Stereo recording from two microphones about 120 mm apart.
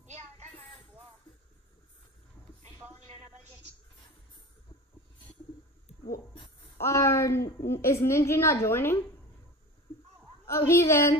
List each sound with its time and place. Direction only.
0.0 s a sound: 70° right (ahead or behind)
6.8 s a woman's voice: 25° left (ahead or behind)
10.4 s a woman's voice: 20° left (ahead or behind)